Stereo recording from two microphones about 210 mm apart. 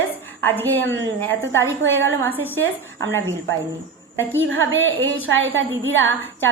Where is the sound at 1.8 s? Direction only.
65° right (ahead or behind).